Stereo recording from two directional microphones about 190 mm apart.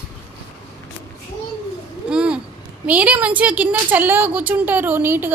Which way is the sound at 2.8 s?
5° right (ahead or behind).